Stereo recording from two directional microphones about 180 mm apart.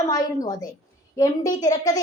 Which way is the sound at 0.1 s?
20° left (ahead or behind).